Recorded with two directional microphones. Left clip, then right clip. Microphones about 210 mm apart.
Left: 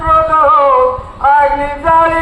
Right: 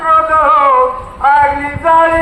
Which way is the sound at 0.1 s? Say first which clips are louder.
Even; 35° right (ahead or behind).